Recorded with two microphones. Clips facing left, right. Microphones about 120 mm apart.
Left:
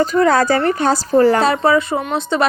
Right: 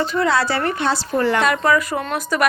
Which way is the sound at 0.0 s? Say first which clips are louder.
Left 5 dB; 45° left (ahead or behind).